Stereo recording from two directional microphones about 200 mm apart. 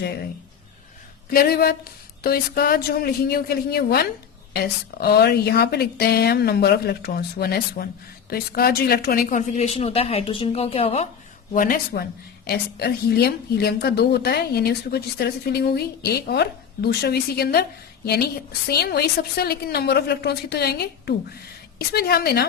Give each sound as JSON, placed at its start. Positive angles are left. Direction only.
{"t": 1.3, "sound": "speech", "side_deg": 50}
{"t": 11.5, "sound": "speech", "side_deg": 45}